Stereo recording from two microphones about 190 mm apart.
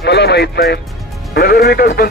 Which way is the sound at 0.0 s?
60° left (ahead or behind).